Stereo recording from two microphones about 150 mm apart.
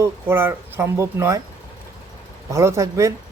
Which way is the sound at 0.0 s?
15° right (ahead or behind).